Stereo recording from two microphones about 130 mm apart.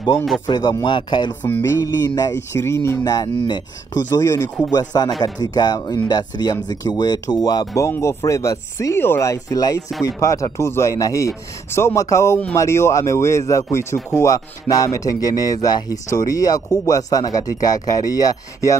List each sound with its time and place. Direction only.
0.5 s speech: 35° left (ahead or behind)
1.4 s music: 15° left (ahead or behind)
1.8 s speech: 30° left (ahead or behind)
4.6 s speech: 30° left (ahead or behind)